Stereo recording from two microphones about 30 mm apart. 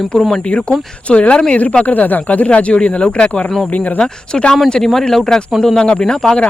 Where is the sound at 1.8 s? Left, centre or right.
Left.